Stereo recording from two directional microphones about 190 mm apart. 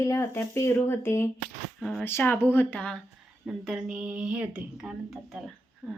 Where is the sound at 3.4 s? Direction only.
5° right (ahead or behind).